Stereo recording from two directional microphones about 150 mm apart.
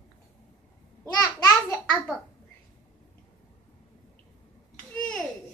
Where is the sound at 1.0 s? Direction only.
20° left (ahead or behind).